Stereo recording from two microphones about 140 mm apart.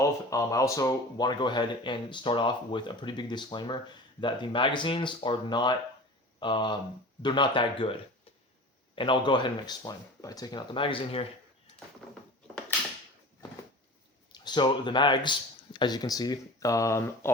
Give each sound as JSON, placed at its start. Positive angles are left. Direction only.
{"t": 0.0, "sound": "speech", "side_deg": 25}
{"t": 9.0, "sound": "speech", "side_deg": 35}
{"t": 14.3, "sound": "a man's voice", "side_deg": 30}